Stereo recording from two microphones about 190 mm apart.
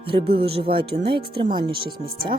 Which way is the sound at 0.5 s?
30° right (ahead or behind).